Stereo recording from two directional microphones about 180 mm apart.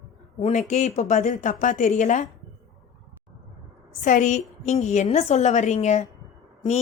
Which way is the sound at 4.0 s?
45° left (ahead or behind).